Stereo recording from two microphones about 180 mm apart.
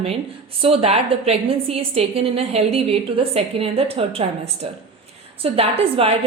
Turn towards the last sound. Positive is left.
turn(degrees=-35)  # may be behind; listen again after turning